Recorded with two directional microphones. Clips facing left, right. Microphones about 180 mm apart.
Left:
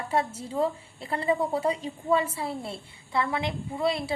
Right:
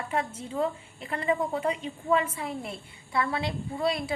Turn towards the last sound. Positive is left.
turn(degrees=20)  # may be behind; listen again after turning